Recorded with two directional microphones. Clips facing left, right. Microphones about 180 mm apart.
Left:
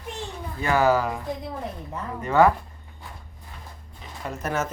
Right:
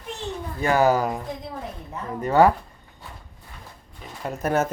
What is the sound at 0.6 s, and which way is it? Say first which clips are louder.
Speech: right 1 dB; 45° right (ahead or behind).